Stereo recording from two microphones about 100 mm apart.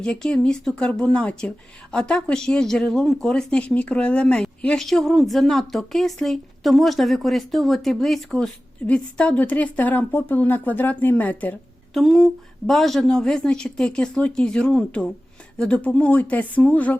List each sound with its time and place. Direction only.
0.0 s a woman's voice: 10° left (ahead or behind)
11.9 s speech: centre (ahead or behind)